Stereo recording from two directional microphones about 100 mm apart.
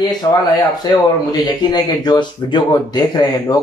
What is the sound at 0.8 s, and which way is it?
Speech, 45° left (ahead or behind).